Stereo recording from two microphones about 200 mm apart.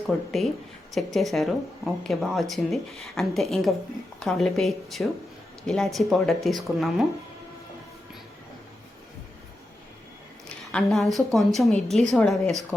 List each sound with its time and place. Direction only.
0.3 s speech: centre (ahead or behind)
10.7 s speech: 5° left (ahead or behind)